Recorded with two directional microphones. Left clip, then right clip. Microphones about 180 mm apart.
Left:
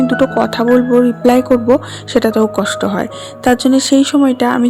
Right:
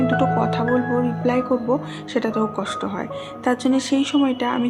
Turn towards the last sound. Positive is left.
turn(degrees=40)  # may be behind; listen again after turning